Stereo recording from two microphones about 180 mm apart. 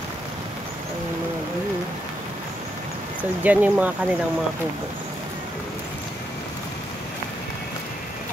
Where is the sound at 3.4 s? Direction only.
10° right (ahead or behind).